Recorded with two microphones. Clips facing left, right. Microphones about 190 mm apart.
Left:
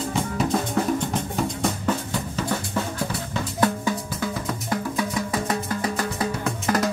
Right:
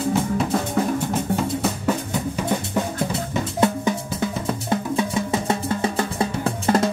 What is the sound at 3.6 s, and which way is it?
Music, 25° right (ahead or behind).